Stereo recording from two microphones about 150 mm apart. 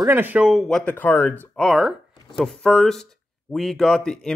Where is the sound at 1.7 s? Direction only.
Centre (ahead or behind).